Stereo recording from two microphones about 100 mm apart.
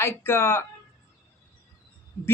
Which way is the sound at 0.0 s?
25° left (ahead or behind).